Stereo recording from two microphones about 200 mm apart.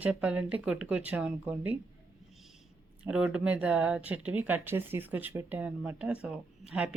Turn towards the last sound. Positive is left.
turn(degrees=-5)  # may be behind; listen again after turning